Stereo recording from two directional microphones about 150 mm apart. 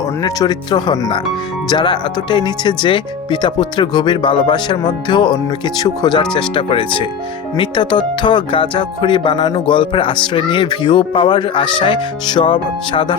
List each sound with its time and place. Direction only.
0.2 s speech: 25° left (ahead or behind)